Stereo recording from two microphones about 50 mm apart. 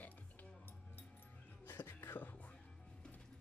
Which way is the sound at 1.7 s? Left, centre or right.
Left.